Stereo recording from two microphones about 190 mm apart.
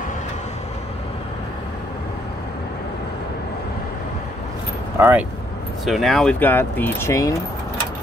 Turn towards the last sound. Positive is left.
turn(degrees=15)  # may be behind; listen again after turning